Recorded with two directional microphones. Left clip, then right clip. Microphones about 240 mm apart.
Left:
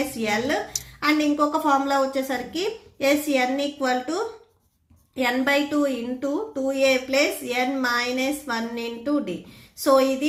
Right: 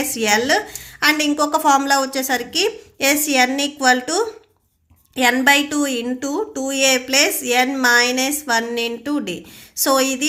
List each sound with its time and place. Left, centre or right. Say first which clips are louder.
0.2 s a woman's voice: right 9 dB; right